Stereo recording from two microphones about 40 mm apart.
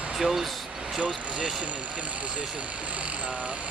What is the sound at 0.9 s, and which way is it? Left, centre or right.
Speech, right.